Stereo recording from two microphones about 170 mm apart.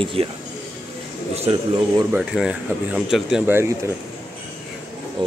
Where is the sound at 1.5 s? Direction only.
35° right (ahead or behind).